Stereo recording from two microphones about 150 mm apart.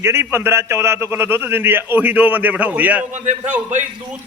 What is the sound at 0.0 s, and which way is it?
A man's voice, 15° right (ahead or behind).